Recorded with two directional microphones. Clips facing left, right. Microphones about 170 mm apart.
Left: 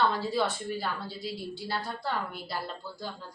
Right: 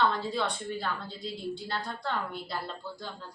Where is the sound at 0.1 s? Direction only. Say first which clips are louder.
Left 2 dB; 5° left (ahead or behind).